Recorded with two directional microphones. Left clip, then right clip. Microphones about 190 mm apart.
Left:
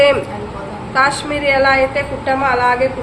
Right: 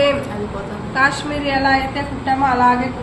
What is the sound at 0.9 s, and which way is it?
A woman's voice, 65° left (ahead or behind).